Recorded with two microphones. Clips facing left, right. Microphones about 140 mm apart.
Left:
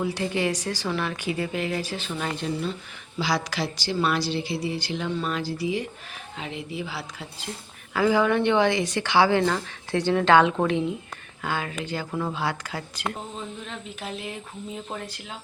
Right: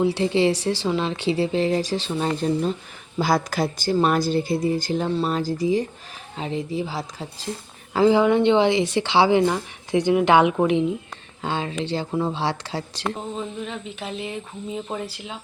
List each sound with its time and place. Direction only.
0.0 s speech: 25° right (ahead or behind)
7.9 s speech: 25° right (ahead or behind)
13.7 s speech: centre (ahead or behind)